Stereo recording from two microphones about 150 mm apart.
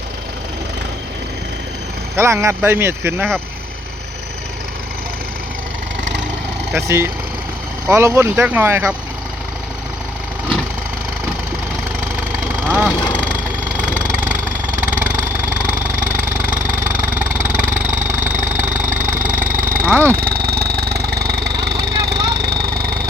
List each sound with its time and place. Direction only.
2.1 s speech: 20° right (ahead or behind)
6.7 s speech: 20° right (ahead or behind)
12.6 s speech: 10° right (ahead or behind)
17.0 s engine: 10° right (ahead or behind)
18.9 s vehicle: 60° right (ahead or behind)
19.8 s speech: 15° right (ahead or behind)
20.1 s engine: 90° right